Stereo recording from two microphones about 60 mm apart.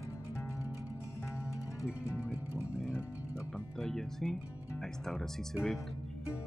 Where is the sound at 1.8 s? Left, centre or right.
Left.